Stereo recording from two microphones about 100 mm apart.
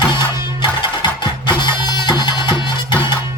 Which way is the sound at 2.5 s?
30° right (ahead or behind).